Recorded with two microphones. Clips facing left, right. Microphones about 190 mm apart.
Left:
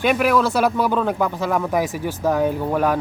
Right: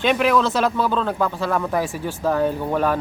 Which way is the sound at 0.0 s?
5° left (ahead or behind).